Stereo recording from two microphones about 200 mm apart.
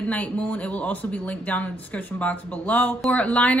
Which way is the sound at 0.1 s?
5° left (ahead or behind).